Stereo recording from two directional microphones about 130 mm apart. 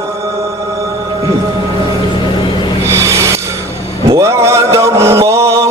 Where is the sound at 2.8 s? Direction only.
20° right (ahead or behind).